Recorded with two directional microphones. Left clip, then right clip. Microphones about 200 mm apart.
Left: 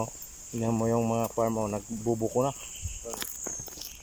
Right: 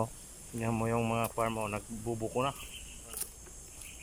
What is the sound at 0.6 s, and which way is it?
Speech, 20° left (ahead or behind).